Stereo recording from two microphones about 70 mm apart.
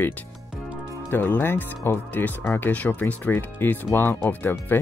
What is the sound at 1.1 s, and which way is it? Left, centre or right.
Speech, left.